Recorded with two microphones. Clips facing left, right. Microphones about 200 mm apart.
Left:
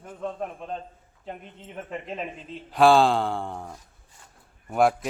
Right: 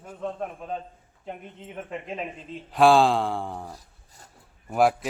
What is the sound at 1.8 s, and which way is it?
A man's voice, centre (ahead or behind).